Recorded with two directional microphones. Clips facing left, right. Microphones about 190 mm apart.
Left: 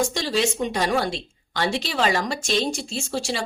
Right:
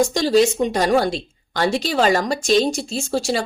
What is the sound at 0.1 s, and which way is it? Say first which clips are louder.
A woman's voice: right 8 dB; 40° right (ahead or behind).